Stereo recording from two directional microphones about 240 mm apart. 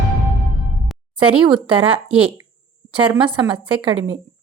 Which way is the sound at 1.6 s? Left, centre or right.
Right.